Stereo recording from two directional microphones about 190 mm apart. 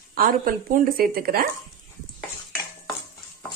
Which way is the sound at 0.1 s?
50° right (ahead or behind).